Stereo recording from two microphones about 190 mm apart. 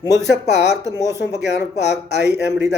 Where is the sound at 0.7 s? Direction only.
20° left (ahead or behind).